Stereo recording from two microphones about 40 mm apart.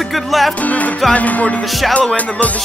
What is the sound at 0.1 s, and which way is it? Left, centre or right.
Music, centre.